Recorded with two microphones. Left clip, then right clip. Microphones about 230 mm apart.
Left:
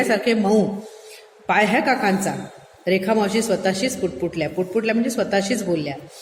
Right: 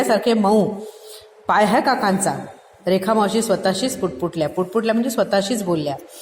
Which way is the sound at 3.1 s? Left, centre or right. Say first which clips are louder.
Right 2 dB; centre.